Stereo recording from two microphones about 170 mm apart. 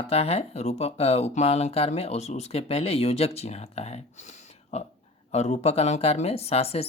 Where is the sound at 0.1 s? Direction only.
35° left (ahead or behind).